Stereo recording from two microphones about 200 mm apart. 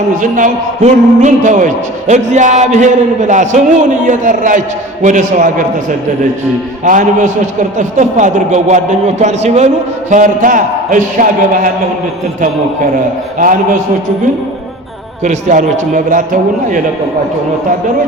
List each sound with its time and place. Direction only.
0.2 s a man's voice: 40° right (ahead or behind)
6.8 s a man's voice: 40° right (ahead or behind)
13.4 s a man's voice: 40° right (ahead or behind)
15.2 s a man's voice: 35° right (ahead or behind)